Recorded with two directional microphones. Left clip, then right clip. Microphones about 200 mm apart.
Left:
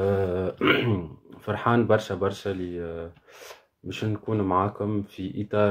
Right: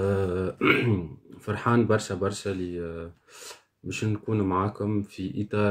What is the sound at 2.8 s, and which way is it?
Speech, 30° right (ahead or behind).